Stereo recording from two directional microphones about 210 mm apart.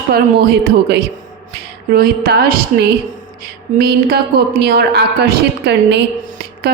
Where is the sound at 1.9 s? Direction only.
45° right (ahead or behind).